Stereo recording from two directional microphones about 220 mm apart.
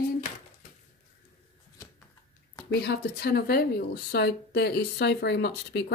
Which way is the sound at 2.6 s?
45° left (ahead or behind).